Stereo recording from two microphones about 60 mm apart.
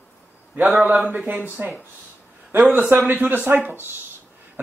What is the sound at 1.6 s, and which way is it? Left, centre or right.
A man's voice, right.